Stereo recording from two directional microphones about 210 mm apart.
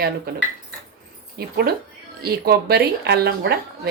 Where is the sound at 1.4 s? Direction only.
50° right (ahead or behind).